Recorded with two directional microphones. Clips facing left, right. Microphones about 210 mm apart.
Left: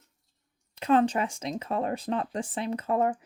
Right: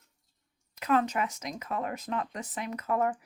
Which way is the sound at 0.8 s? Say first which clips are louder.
Left 4 dB; 30° left (ahead or behind).